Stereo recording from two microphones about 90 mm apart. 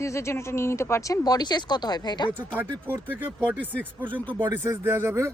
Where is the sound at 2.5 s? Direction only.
20° right (ahead or behind).